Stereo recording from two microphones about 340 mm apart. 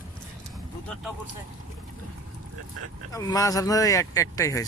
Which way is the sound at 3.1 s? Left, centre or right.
Centre.